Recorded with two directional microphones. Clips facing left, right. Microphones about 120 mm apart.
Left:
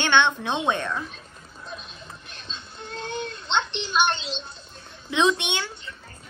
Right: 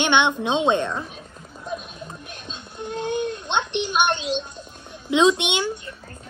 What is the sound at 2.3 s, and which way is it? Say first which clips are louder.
Music: right 4 dB; 50° right (ahead or behind).